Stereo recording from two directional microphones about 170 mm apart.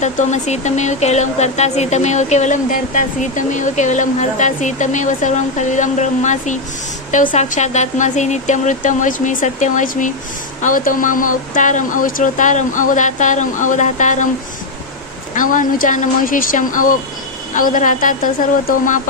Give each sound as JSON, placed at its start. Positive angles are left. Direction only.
{"t": 0.0, "sound": "speech", "side_deg": 45}
{"t": 15.3, "sound": "speech", "side_deg": 50}